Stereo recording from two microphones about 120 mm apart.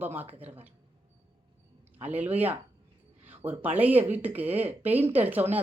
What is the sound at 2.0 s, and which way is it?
Speech, 15° right (ahead or behind).